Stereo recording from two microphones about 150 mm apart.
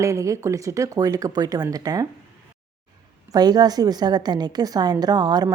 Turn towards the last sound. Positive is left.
turn(degrees=-30)  # may be behind; listen again after turning